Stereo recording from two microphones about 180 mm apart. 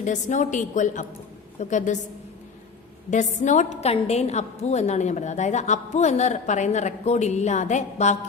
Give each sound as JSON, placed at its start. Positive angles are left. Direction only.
{"t": 0.0, "sound": "a woman's voice", "side_deg": 45}
{"t": 3.1, "sound": "a woman's voice", "side_deg": 40}